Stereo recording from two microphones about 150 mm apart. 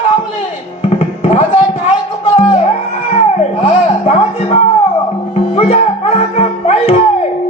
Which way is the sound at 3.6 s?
40° left (ahead or behind).